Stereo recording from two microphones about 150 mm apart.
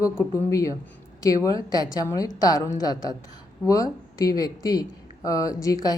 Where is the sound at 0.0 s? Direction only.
20° left (ahead or behind).